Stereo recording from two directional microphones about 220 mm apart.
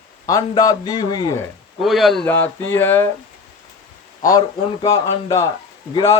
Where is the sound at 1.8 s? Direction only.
Centre (ahead or behind).